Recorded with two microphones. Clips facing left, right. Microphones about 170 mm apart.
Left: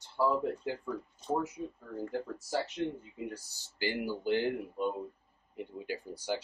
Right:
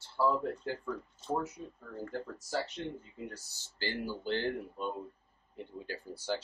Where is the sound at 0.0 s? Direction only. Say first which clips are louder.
Left 1 dB; 15° left (ahead or behind).